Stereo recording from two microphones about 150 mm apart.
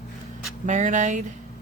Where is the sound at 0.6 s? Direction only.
55° right (ahead or behind).